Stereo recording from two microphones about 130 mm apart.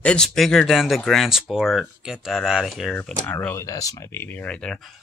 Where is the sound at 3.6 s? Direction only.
25° left (ahead or behind); by 4.9 s 5° left (ahead or behind).